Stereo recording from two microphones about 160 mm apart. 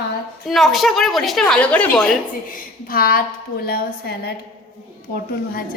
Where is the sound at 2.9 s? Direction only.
70° left (ahead or behind).